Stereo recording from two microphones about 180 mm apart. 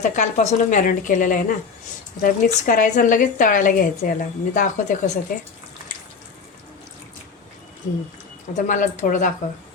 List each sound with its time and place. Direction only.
0.0 s a woman's voice: 45° left (ahead or behind)
8.5 s a woman's voice: 45° left (ahead or behind)